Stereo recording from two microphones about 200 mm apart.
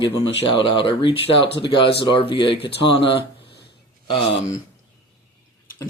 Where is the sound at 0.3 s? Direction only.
60° left (ahead or behind).